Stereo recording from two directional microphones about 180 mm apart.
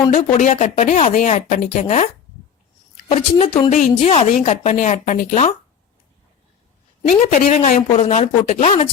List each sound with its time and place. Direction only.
0.1 s a woman's voice: 40° left (ahead or behind)
3.1 s a woman's voice: 35° left (ahead or behind)
7.4 s a woman's voice: 40° left (ahead or behind)